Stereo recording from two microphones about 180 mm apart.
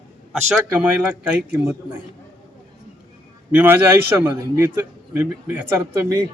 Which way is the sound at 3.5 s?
10° right (ahead or behind).